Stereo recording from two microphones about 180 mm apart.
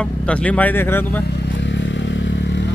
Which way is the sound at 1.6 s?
85° left.